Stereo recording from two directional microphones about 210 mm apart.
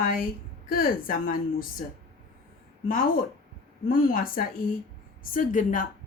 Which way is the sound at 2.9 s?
40° left (ahead or behind).